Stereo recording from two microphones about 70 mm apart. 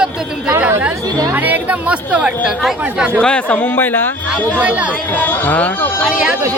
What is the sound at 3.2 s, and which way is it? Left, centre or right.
A man's voice, centre.